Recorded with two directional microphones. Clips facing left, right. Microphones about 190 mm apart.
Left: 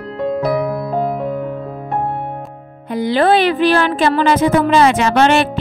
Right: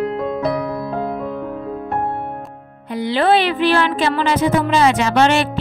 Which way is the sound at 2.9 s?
45° left (ahead or behind).